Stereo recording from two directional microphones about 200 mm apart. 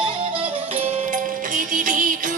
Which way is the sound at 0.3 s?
30° right (ahead or behind).